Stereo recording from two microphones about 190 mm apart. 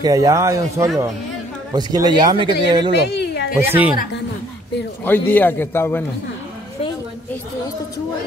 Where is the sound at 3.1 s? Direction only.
60° left (ahead or behind).